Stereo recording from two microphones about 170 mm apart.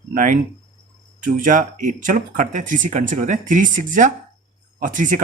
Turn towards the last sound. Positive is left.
turn(degrees=-50)  # may be behind; listen again after turning